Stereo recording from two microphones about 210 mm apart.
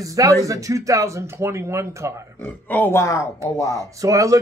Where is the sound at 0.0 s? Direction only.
15° right (ahead or behind).